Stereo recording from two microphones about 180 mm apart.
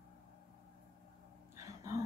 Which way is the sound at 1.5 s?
15° right (ahead or behind).